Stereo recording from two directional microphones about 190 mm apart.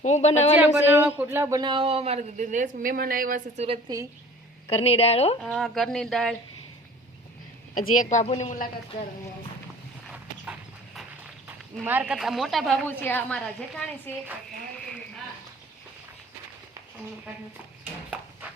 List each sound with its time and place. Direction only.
0.0 s a woman's voice: 35° left (ahead or behind)
0.6 s a man's voice: 10° right (ahead or behind); by 3.8 s 35° right (ahead or behind)
4.7 s a woman's voice: 30° left (ahead or behind)
5.4 s speech: centre (ahead or behind)
7.9 s a woman's voice: 35° left (ahead or behind)
11.4 s a woman's voice: 10° right (ahead or behind); by 14.2 s 10° left (ahead or behind)